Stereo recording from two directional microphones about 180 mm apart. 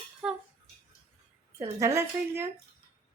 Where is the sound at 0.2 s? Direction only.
Centre (ahead or behind).